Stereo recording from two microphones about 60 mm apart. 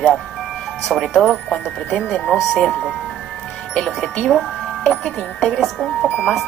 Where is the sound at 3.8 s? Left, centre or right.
Centre.